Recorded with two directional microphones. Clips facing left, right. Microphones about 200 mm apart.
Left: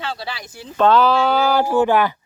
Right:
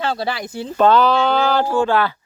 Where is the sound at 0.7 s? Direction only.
Centre (ahead or behind); by 2.2 s 15° left (ahead or behind).